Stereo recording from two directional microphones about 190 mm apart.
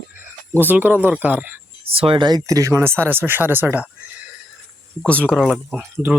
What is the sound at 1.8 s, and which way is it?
Speech, 30° right (ahead or behind).